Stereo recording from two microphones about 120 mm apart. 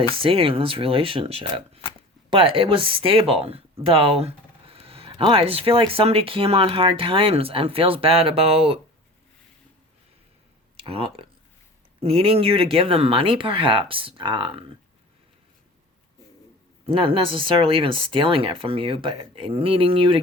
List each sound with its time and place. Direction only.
0.2 s speech: 50° right (ahead or behind)
10.8 s speech: 55° right (ahead or behind)
16.8 s speech: 50° right (ahead or behind)